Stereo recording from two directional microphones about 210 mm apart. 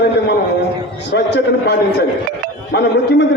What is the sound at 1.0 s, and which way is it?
A man's voice, 55° left (ahead or behind).